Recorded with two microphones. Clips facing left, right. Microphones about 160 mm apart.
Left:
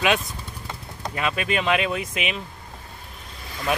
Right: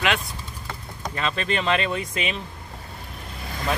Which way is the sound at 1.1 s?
10° left (ahead or behind).